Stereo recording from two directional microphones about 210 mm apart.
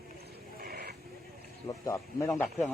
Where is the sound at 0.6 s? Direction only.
45° right (ahead or behind).